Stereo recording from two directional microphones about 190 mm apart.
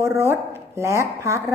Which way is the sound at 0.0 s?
15° right (ahead or behind).